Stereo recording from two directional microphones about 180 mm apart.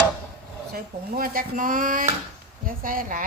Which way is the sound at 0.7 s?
55° right (ahead or behind).